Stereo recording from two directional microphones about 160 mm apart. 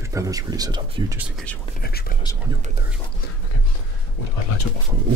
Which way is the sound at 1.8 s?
75° left (ahead or behind).